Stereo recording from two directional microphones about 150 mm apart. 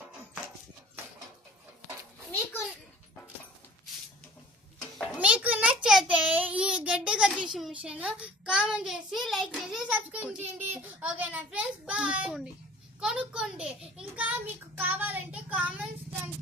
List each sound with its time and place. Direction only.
2.3 s a sound: 15° left (ahead or behind)
5.1 s child singing: 10° right (ahead or behind)
8.5 s a child's voice: 5° right (ahead or behind)